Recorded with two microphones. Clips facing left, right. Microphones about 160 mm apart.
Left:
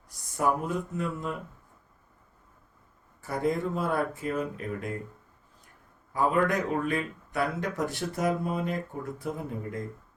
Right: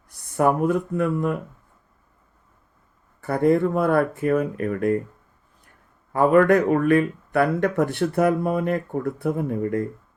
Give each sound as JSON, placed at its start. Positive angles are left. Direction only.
{"t": 0.1, "sound": "speech", "side_deg": -60}
{"t": 3.2, "sound": "speech", "side_deg": -60}
{"t": 6.1, "sound": "speech", "side_deg": -60}